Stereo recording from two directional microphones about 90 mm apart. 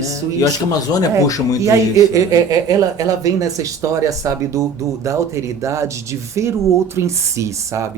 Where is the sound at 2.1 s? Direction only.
40° right (ahead or behind).